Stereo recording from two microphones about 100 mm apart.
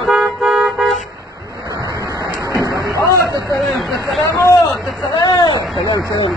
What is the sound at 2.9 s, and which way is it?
Vehicle, 35° right (ahead or behind).